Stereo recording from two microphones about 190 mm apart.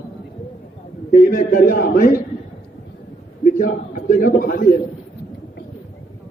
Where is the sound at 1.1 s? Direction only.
45° left (ahead or behind).